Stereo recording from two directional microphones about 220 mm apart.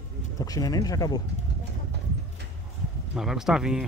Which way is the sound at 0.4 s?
15° left (ahead or behind).